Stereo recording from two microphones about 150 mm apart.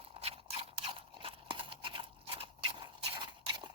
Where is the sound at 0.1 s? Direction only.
40° right (ahead or behind).